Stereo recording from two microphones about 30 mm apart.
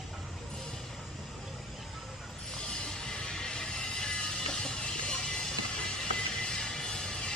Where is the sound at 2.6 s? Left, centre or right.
Left.